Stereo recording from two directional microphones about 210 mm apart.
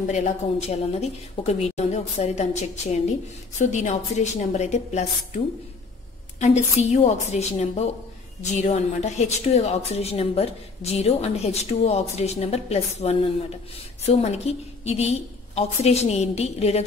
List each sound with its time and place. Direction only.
0.0 s a woman's voice: 35° left (ahead or behind)
6.8 s a woman's voice: 30° left (ahead or behind)